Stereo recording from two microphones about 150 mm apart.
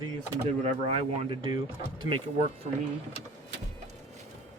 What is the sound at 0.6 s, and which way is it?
Speech, 45° right (ahead or behind).